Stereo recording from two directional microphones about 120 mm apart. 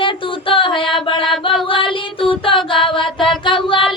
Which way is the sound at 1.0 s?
45° left (ahead or behind).